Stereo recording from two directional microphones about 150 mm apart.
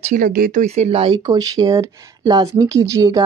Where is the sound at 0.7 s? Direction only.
45° right (ahead or behind).